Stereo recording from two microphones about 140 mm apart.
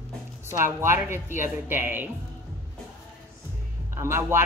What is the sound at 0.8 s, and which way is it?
Speech, 15° right (ahead or behind).